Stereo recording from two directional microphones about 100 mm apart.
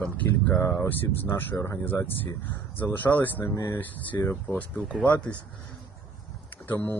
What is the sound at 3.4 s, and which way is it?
Speech, 30° left (ahead or behind).